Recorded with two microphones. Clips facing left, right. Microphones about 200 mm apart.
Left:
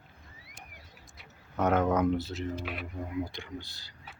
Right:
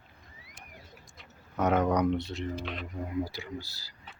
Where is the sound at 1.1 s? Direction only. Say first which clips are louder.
Even; centre (ahead or behind).